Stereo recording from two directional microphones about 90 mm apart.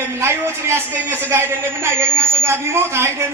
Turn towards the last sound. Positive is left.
turn(degrees=-30)  # may be behind; listen again after turning